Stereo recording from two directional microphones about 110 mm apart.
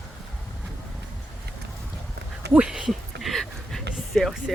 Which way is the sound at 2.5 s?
10° right (ahead or behind).